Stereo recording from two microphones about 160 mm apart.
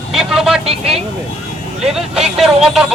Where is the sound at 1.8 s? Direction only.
Centre (ahead or behind).